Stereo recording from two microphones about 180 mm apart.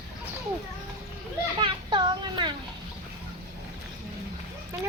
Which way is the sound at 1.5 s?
25° right (ahead or behind).